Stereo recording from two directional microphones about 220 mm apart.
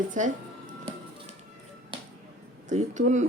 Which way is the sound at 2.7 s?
35° right (ahead or behind).